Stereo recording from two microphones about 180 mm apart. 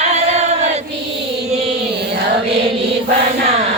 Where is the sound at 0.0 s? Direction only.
40° right (ahead or behind).